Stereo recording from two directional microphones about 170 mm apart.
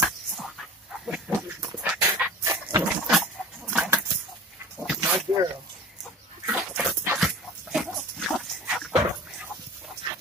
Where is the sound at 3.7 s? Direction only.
5° right (ahead or behind).